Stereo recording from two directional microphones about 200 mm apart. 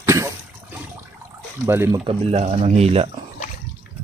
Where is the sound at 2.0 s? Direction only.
30° right (ahead or behind).